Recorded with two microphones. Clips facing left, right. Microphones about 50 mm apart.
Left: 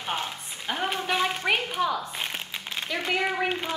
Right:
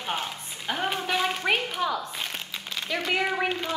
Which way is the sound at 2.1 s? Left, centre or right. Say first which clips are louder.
Left 1 dB; left.